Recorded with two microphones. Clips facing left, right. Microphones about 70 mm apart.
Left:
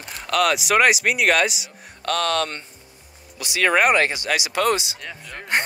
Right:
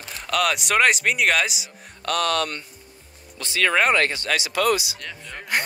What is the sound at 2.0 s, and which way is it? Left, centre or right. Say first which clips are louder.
Speech: left 1 dB; left.